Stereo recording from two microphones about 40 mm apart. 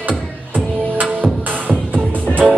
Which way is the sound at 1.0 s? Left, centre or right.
Right.